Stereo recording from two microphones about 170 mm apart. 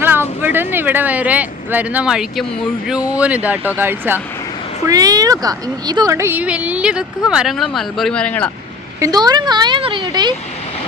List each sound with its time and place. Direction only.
0.0 s speech: 10° right (ahead or behind); by 8.4 s 5° left (ahead or behind)
9.0 s speech: 20° right (ahead or behind)